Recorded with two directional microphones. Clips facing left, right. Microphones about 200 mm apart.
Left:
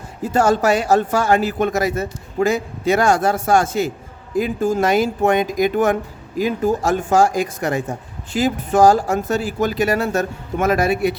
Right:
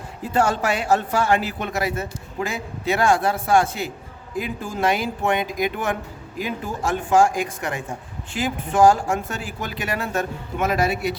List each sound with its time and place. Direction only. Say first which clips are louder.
0.2 s a man's voice: left 5 dB; 45° left (ahead or behind)